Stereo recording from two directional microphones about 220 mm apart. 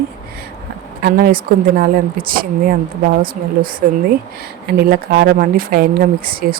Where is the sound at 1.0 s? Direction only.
45° right (ahead or behind).